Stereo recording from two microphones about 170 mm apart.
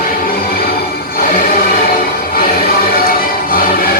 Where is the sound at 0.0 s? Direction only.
60° left (ahead or behind).